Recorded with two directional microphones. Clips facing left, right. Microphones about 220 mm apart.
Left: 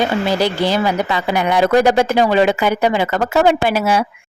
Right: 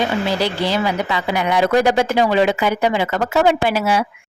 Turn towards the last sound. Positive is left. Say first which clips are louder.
# left 2 dB
turn(degrees=45)  # may be behind; listen again after turning